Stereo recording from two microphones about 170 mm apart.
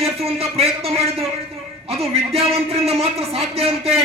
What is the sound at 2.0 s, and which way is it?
A man's voice, 35° right (ahead or behind).